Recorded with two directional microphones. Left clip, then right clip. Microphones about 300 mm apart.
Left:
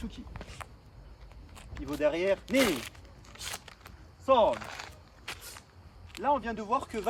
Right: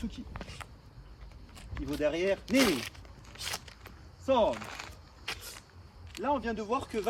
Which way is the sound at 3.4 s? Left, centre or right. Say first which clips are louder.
Right 2 dB; centre.